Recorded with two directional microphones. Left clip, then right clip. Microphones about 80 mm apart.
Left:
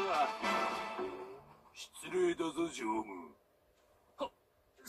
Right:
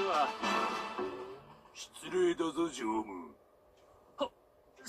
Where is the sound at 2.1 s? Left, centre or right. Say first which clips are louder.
Right 3 dB; right.